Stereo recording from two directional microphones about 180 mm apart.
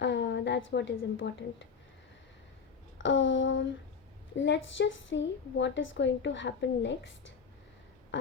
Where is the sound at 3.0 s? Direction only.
90° left.